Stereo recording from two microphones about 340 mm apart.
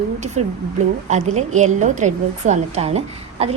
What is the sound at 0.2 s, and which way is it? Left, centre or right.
A woman's voice, centre.